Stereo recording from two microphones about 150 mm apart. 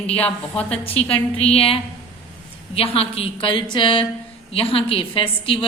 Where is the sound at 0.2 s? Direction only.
10° left (ahead or behind).